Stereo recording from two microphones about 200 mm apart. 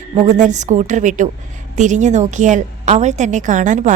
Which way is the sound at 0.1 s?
35° right (ahead or behind).